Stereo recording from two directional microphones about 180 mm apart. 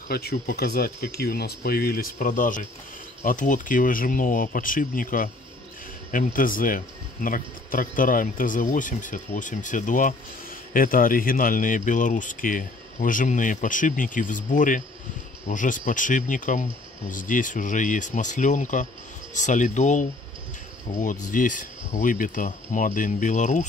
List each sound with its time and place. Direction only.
0.1 s speech: 60° left (ahead or behind); by 23.7 s 40° left (ahead or behind)